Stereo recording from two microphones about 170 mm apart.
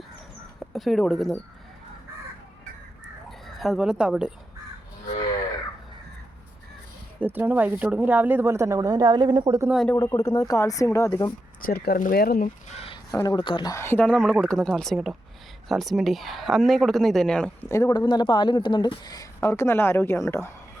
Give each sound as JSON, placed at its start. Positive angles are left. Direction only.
{"t": 0.7, "sound": "a woman's voice", "side_deg": 0}
{"t": 3.2, "sound": "speech", "side_deg": 0}
{"t": 7.2, "sound": "speech", "side_deg": -10}
{"t": 9.9, "sound": "speech", "side_deg": 15}
{"t": 11.6, "sound": "speech", "side_deg": 65}
{"t": 12.6, "sound": "a sound", "side_deg": 35}
{"t": 13.1, "sound": "a woman's voice", "side_deg": 25}
{"t": 17.7, "sound": "speech", "side_deg": 20}